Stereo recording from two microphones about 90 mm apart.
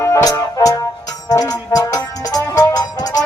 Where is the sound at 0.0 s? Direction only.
35° left (ahead or behind).